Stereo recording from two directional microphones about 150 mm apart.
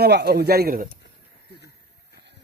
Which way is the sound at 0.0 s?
90° right.